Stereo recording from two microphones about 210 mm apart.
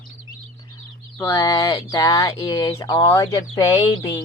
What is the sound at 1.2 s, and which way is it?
Speech, 15° left (ahead or behind).